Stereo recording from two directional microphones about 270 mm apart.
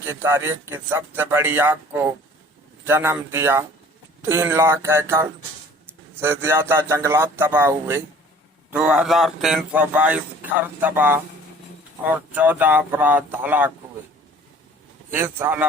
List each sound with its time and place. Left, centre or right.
0.0 s speech: centre
15.1 s speech: centre